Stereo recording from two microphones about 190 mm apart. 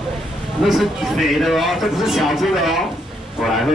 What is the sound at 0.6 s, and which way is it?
A man's voice, centre (ahead or behind).